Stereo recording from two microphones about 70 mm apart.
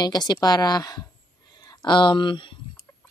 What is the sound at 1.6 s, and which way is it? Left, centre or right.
Speech, left.